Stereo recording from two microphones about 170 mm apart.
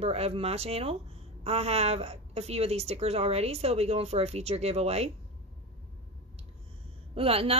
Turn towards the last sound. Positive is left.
turn(degrees=-35)  # may be behind; listen again after turning